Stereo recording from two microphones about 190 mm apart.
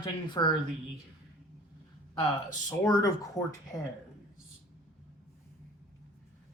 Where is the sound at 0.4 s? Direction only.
20° left (ahead or behind).